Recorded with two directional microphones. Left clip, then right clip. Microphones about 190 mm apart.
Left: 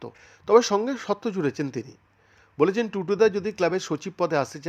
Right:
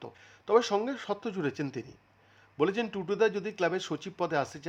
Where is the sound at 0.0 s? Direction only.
20° left (ahead or behind).